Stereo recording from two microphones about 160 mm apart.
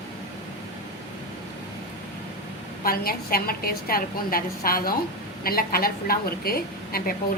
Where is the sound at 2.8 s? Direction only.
65° left (ahead or behind).